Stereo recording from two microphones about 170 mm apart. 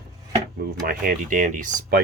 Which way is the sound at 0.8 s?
55° right (ahead or behind).